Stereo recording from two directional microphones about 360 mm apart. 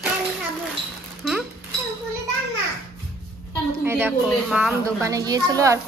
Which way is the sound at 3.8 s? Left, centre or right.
Centre.